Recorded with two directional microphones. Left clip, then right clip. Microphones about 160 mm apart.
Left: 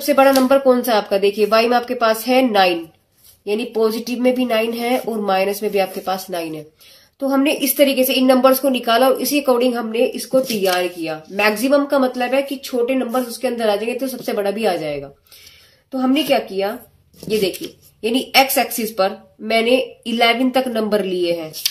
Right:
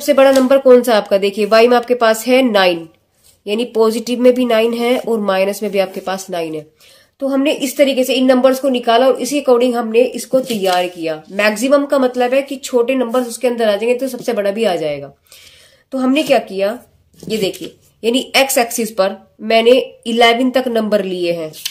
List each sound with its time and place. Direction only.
0.0 s speech: 40° right (ahead or behind)
7.6 s a woman's voice: 20° right (ahead or behind); by 16.7 s 40° right (ahead or behind)
18.0 s speech: 35° right (ahead or behind)